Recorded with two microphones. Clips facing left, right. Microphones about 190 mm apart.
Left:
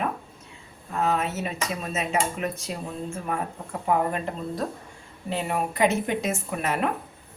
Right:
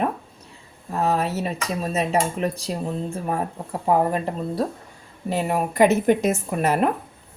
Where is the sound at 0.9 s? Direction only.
35° right (ahead or behind).